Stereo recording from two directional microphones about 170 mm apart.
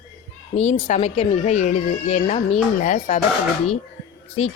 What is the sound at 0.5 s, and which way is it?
Speech, 40° left (ahead or behind).